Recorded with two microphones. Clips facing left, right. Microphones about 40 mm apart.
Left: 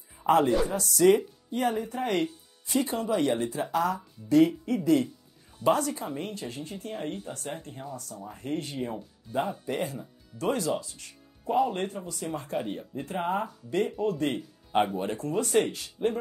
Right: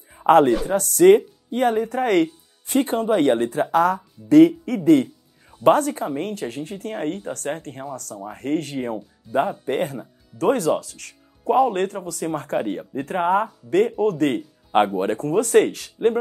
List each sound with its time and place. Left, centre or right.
0.3 s speech: right
9.3 s speech: right
9.7 s speech: right